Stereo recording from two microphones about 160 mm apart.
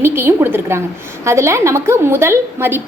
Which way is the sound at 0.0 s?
15° right (ahead or behind).